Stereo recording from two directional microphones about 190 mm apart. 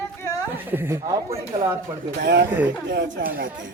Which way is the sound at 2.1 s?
65° right (ahead or behind).